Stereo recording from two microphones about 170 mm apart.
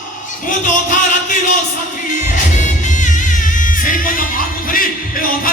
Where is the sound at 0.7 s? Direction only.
50° left (ahead or behind).